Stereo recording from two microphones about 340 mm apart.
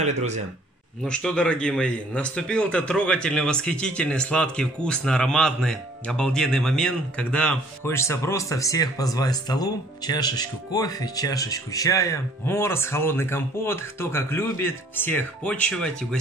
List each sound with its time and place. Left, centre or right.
0.0 s speech: centre
1.0 s a man's voice: centre